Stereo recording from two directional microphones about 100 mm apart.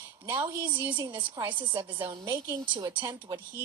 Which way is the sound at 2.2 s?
30° right (ahead or behind).